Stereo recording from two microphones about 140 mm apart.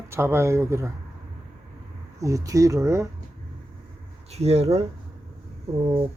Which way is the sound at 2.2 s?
25° right (ahead or behind).